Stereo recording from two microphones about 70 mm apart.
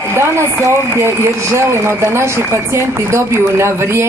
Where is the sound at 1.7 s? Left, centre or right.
Right.